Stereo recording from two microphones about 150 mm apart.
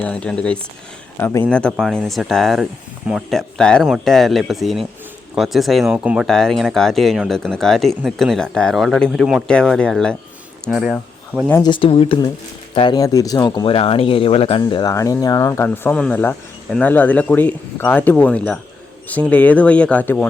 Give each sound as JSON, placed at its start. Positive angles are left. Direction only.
{"t": 0.0, "sound": "speech", "side_deg": 5}
{"t": 11.6, "sound": "speech", "side_deg": 35}
{"t": 13.7, "sound": "speech", "side_deg": 40}
{"t": 14.6, "sound": "speech", "side_deg": 25}